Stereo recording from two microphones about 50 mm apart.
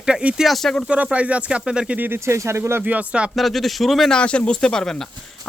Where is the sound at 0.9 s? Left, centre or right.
Right.